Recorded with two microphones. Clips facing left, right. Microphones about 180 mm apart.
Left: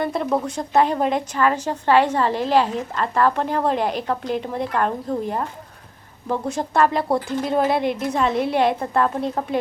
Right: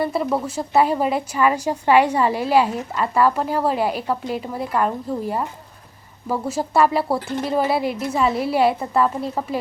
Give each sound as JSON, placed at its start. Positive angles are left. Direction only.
{"t": 0.0, "sound": "a woman's voice", "side_deg": -5}